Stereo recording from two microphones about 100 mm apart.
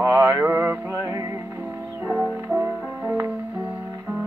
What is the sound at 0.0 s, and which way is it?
Mantra, 25° right (ahead or behind).